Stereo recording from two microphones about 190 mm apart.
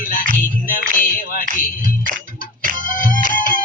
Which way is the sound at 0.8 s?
45° left (ahead or behind).